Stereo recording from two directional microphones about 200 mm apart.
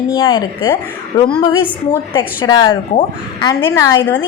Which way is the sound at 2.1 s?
20° left (ahead or behind).